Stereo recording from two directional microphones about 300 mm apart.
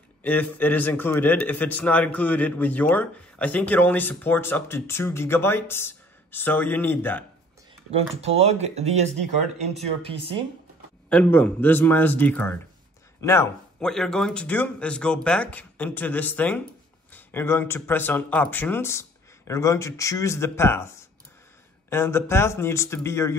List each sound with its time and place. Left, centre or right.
0.2 s a man's voice: centre
7.9 s speech: centre
11.1 s a man's voice: centre